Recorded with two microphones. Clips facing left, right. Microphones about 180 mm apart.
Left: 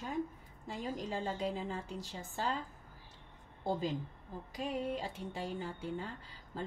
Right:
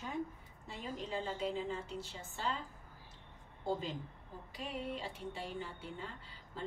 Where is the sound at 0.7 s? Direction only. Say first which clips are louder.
Left 2 dB; 40° left (ahead or behind).